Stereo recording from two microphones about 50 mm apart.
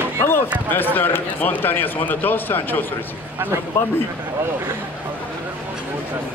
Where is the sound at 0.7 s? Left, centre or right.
Left.